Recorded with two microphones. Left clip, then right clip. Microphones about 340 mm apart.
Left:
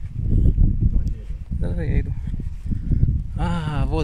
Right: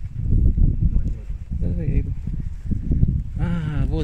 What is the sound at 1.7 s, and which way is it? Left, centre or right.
Speech, left.